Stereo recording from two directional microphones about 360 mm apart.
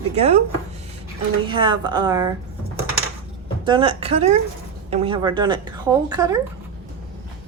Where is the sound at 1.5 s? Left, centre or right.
Centre.